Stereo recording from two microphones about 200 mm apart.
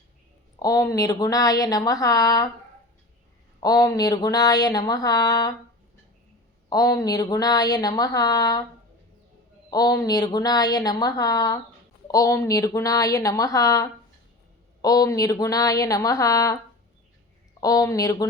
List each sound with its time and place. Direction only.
0.6 s a woman's voice: 15° left (ahead or behind)
3.6 s speech: 20° left (ahead or behind)
6.7 s speech: 20° left (ahead or behind)
9.6 s a woman's voice: 20° left (ahead or behind)
17.6 s a woman's voice: 20° left (ahead or behind)